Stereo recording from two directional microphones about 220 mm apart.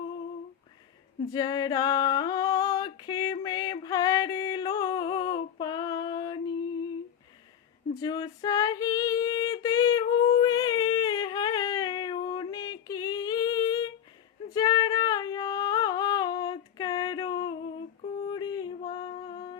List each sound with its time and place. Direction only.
1.3 s female singing: 15° left (ahead or behind)
7.9 s female singing: 15° left (ahead or behind)
18.0 s mantra: 20° left (ahead or behind)